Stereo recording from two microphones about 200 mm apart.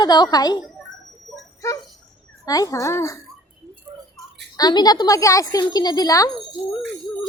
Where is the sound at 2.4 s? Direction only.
15° left (ahead or behind).